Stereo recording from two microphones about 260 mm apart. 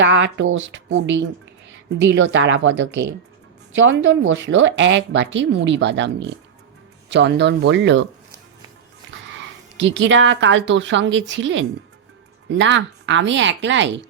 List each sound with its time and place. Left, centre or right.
0.0 s speech: right
9.7 s speech: right